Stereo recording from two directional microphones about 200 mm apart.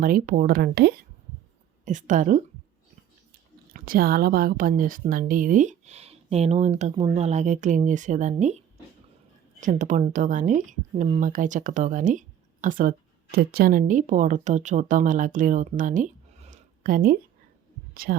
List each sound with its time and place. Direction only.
0.0 s speech: 45° right (ahead or behind)
1.8 s speech: 40° right (ahead or behind)
3.7 s a woman's voice: 45° right (ahead or behind)